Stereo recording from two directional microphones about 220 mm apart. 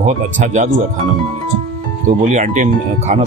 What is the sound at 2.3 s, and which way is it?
Speech, 30° right (ahead or behind).